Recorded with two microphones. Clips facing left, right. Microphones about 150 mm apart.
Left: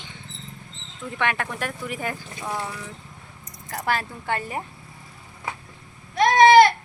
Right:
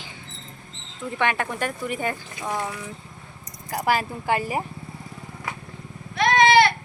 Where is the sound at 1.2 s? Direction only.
Centre (ahead or behind).